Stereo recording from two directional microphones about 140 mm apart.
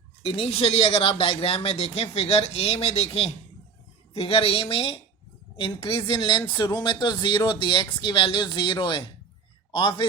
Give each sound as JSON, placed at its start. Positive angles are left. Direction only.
{"t": 0.3, "sound": "speech", "side_deg": 45}